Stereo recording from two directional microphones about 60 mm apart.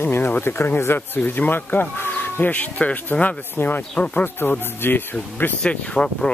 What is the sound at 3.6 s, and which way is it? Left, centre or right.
Speech, left.